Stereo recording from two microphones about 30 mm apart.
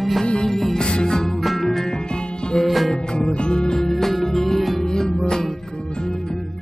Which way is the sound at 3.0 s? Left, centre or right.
Left.